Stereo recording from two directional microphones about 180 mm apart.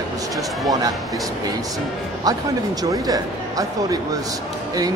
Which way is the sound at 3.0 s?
20° right (ahead or behind).